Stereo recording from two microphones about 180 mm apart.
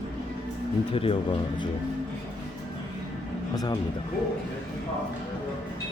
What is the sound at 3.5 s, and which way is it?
Speech, 20° left (ahead or behind).